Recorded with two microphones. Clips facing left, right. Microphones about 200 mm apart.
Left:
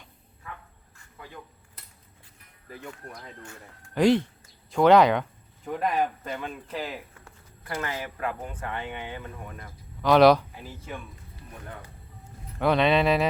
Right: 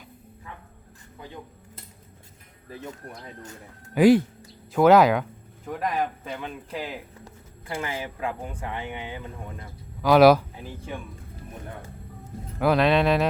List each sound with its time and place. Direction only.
1.2 s a sound: 25° right (ahead or behind)
2.6 s speech: 25° right (ahead or behind)
3.9 s a man's voice: 5° right (ahead or behind)
10.0 s a man's voice: 5° right (ahead or behind)
12.5 s a man's voice: centre (ahead or behind)